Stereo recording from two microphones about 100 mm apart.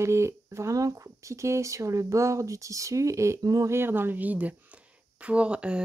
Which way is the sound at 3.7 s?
20° right (ahead or behind).